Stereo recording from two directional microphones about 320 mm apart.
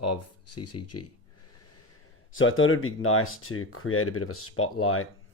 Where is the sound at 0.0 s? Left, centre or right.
Left.